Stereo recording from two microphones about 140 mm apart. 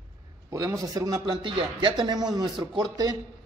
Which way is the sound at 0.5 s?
25° right (ahead or behind).